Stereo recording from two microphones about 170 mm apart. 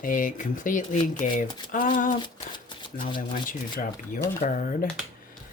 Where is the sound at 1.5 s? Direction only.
25° left (ahead or behind).